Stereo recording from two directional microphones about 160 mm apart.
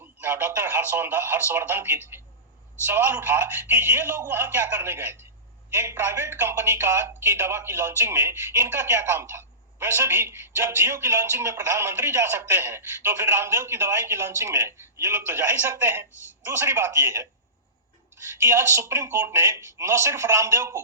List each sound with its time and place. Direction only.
0.0 s speech: 10° right (ahead or behind)
18.4 s speech: 15° right (ahead or behind)